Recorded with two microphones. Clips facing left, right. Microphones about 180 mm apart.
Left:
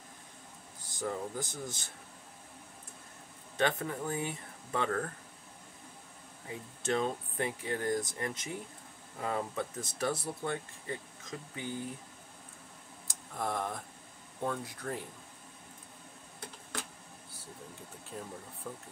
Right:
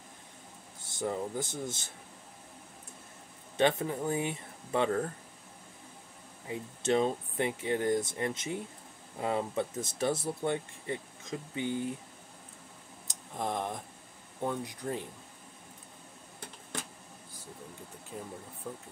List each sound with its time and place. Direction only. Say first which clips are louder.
0.9 s speech: right 3 dB; 25° right (ahead or behind)
3.5 s speech: right 4 dB; 20° right (ahead or behind)
6.4 s speech: right 4 dB; 20° right (ahead or behind)
13.0 s tick: right 1 dB; 20° right (ahead or behind)
14.4 s speech: right 2 dB; 15° right (ahead or behind)
18.7 s speech: right 2 dB; 15° right (ahead or behind)